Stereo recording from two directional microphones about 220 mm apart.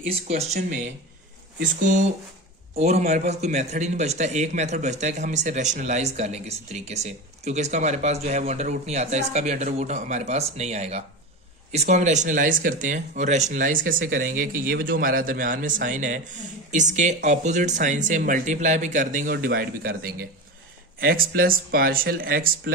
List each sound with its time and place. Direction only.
0.0 s speech: 30° right (ahead or behind)